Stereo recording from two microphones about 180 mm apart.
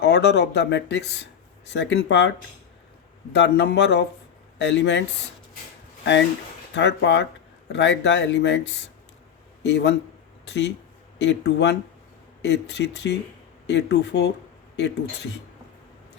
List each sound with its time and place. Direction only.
0.0 s speech: 70° left (ahead or behind)
3.3 s speech: 70° left (ahead or behind)
4.5 s speech: 85° left
6.7 s speech: 75° left (ahead or behind)